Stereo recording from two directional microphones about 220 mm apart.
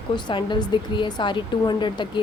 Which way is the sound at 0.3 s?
20° left (ahead or behind).